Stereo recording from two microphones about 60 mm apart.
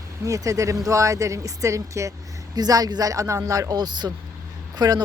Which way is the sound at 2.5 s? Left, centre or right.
Right.